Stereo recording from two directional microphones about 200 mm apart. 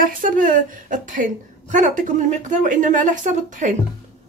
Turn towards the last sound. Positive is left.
turn(degrees=-40)  # may be behind; listen again after turning